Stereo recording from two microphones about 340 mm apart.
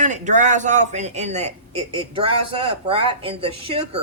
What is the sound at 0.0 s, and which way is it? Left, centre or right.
A man's voice, right.